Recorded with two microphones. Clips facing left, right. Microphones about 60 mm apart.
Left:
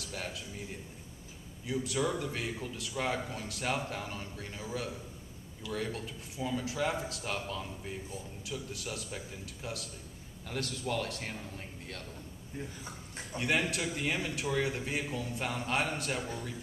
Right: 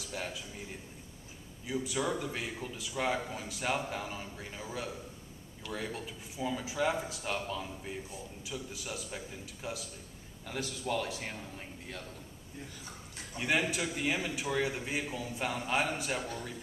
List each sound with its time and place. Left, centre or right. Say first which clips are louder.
0.0 s a man's voice: right 1 dB; centre
1.7 s a man's voice: left 1 dB; centre
5.7 s a man's voice: left 2 dB; centre
12.5 s speech: left 5 dB; left
13.4 s a man's voice: even; centre